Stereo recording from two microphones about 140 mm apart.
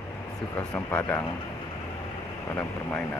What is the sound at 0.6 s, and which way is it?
Speech, 15° left (ahead or behind).